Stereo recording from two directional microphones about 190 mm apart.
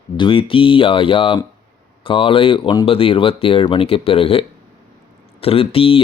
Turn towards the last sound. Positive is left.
turn(degrees=30)  # may be behind; listen again after turning